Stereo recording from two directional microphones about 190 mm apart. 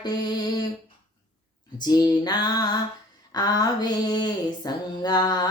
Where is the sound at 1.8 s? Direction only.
20° left (ahead or behind).